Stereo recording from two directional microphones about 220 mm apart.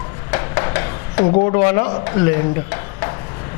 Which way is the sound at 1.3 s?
30° left (ahead or behind).